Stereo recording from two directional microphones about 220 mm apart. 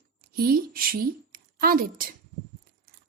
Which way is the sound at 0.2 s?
45° right (ahead or behind).